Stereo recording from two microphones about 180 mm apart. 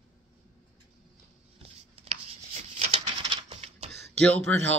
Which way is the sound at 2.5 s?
30° right (ahead or behind).